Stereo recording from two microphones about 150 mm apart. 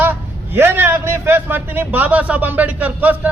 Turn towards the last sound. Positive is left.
turn(degrees=-10)  # may be behind; listen again after turning